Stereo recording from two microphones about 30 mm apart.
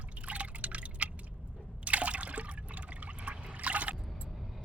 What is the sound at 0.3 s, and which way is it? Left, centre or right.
Drip, right.